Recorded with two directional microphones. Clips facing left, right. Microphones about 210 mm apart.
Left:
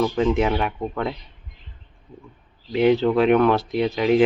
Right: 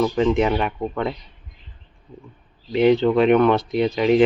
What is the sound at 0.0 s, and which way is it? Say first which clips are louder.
Speech: right 1 dB; centre (ahead or behind).